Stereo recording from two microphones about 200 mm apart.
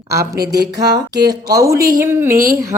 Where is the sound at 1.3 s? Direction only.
20° right (ahead or behind).